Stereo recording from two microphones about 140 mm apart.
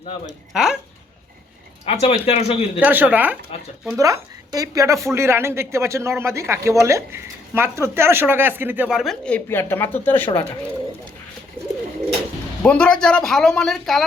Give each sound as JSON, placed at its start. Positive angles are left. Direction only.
{"t": 0.5, "sound": "speech", "side_deg": -5}
{"t": 1.8, "sound": "speech", "side_deg": 45}
{"t": 2.8, "sound": "a woman's voice", "side_deg": -10}
{"t": 3.9, "sound": "a woman's voice", "side_deg": -25}
{"t": 11.6, "sound": "bird", "side_deg": -15}
{"t": 12.6, "sound": "speech", "side_deg": 10}